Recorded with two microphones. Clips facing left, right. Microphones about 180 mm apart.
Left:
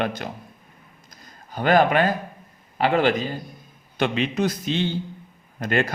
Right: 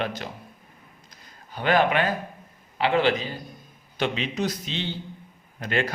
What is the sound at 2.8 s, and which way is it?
A man's voice, 45° left (ahead or behind).